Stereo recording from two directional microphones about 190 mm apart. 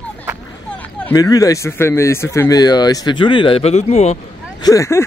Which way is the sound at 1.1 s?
20° left (ahead or behind).